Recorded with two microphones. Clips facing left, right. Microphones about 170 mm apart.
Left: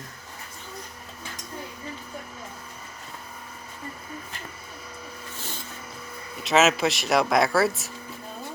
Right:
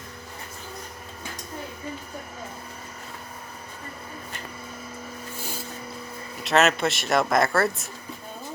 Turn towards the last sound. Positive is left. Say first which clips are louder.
# left 1 dB
turn(degrees=0)  # may be behind; listen again after turning